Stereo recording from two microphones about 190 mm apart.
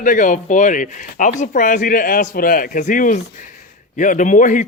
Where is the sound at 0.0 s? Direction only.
45° left (ahead or behind).